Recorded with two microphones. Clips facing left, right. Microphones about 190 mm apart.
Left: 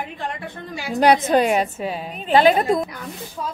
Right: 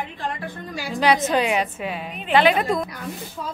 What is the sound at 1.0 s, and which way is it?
A woman's voice, 50° left (ahead or behind).